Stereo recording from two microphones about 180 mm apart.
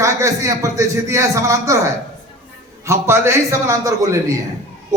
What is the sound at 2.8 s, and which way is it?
A man's voice, 15° right (ahead or behind).